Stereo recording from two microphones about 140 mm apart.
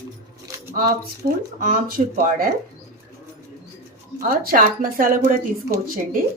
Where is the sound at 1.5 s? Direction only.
70° right (ahead or behind).